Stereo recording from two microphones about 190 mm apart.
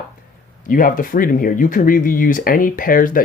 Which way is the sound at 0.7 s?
45° left (ahead or behind).